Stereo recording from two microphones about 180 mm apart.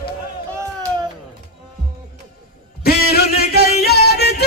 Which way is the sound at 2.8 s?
60° left (ahead or behind).